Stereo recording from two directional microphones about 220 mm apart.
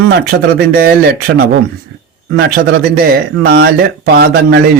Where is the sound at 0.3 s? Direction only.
45° right (ahead or behind).